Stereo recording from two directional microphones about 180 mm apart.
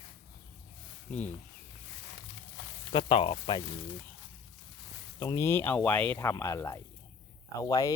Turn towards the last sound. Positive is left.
turn(degrees=20)  # may be behind; listen again after turning